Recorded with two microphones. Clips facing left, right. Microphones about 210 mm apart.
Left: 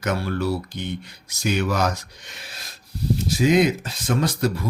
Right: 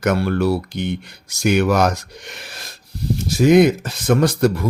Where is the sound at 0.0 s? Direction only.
70° right (ahead or behind).